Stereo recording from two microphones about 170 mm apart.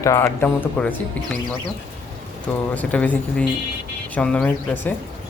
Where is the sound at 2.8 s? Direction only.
10° left (ahead or behind).